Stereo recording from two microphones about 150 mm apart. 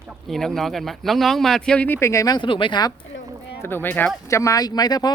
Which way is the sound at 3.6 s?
15° left (ahead or behind).